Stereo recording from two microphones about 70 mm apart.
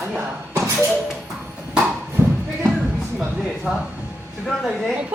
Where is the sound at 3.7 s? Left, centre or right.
Centre.